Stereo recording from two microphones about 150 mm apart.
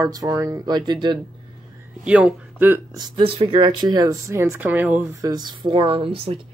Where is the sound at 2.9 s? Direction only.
30° right (ahead or behind); by 5.0 s 10° right (ahead or behind).